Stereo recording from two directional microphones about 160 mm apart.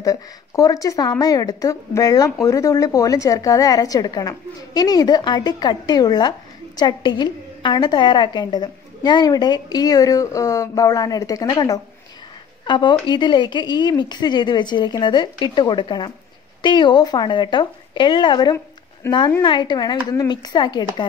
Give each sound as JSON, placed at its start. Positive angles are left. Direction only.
{"t": 0.0, "sound": "a woman's voice", "side_deg": 20}